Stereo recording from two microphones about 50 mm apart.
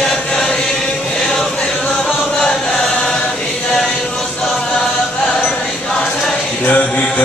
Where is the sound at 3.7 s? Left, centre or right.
Centre.